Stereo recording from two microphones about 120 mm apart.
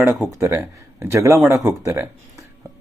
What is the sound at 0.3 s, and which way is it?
Speech, 20° right (ahead or behind).